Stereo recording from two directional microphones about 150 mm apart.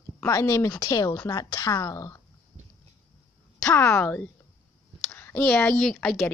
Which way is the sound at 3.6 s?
15° left (ahead or behind).